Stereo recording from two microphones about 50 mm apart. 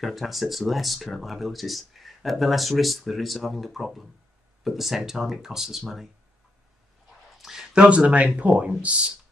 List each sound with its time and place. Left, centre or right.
0.0 s speech: centre
7.3 s a sound: centre
7.7 s speech: right